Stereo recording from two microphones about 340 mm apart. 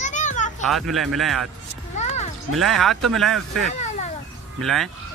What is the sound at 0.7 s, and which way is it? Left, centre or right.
Speech, centre.